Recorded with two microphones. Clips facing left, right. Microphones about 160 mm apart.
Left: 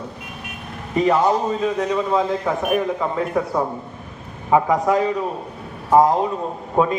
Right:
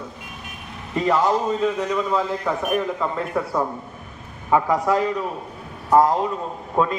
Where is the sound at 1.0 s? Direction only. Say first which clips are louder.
Left 2 dB; 15° left (ahead or behind).